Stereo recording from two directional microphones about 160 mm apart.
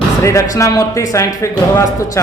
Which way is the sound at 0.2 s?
20° left (ahead or behind).